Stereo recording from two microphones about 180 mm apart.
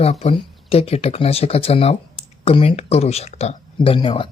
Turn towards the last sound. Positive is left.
turn(degrees=30)  # may be behind; listen again after turning